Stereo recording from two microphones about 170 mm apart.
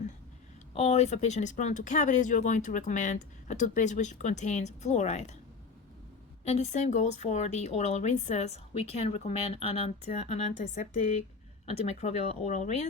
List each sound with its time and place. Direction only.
0.7 s speech: 40° left (ahead or behind)
6.4 s speech: 40° left (ahead or behind)